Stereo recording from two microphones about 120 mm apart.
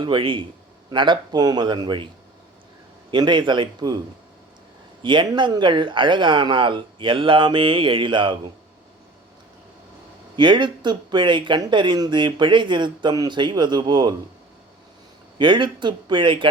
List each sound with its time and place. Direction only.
0.0 s speech: 45° right (ahead or behind)
3.1 s speech: 40° right (ahead or behind)
5.0 s speech: 40° right (ahead or behind)
10.3 s speech: 40° right (ahead or behind)
15.4 s speech: 40° right (ahead or behind)